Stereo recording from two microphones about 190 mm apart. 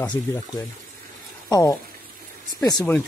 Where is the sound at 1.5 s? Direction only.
15° left (ahead or behind).